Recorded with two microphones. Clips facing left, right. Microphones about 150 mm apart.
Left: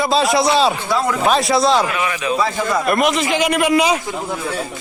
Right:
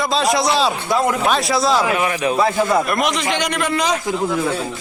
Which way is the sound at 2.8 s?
Centre (ahead or behind).